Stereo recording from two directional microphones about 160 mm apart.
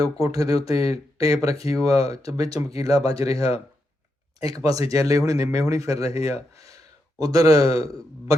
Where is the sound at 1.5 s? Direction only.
20° right (ahead or behind).